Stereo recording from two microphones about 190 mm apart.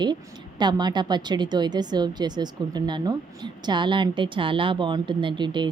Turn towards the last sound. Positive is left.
turn(degrees=-25)  # may be behind; listen again after turning